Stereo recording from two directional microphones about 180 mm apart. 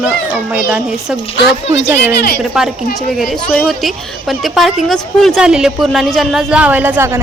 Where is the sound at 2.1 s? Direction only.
60° left (ahead or behind).